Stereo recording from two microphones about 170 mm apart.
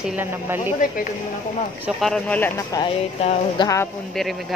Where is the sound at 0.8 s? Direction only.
50° left (ahead or behind).